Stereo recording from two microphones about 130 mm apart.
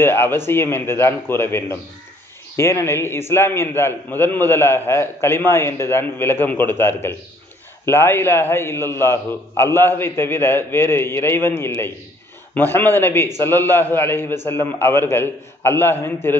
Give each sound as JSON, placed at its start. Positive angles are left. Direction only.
{"t": 0.0, "sound": "a man's voice", "side_deg": 15}